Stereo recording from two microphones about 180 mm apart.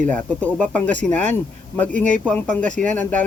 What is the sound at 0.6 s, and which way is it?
Speech, 10° left (ahead or behind).